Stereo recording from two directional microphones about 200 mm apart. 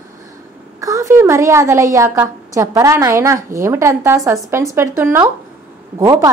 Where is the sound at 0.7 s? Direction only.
15° right (ahead or behind).